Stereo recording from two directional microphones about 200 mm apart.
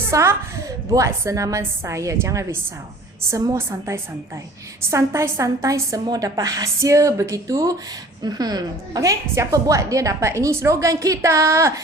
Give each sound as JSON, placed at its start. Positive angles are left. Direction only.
{"t": 0.1, "sound": "a woman's voice", "side_deg": -15}